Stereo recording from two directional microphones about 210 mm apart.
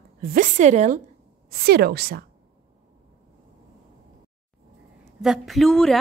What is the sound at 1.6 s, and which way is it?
Speech, 50° right (ahead or behind).